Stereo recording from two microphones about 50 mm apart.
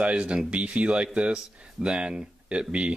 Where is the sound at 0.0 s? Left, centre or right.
Right.